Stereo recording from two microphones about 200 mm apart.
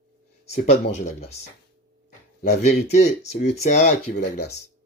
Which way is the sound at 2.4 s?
35° left (ahead or behind).